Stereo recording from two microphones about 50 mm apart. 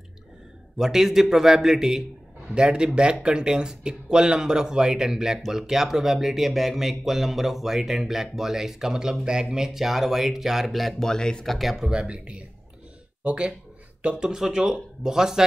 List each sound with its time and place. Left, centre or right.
0.7 s speech: centre
11.0 s speech: centre
11.4 s speech: centre
11.8 s speech: centre